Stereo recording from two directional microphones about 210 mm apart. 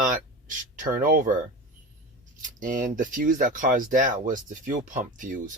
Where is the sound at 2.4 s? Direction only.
40° right (ahead or behind).